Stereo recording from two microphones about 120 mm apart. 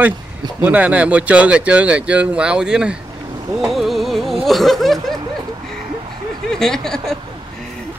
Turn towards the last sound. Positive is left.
turn(degrees=5)  # may be behind; listen again after turning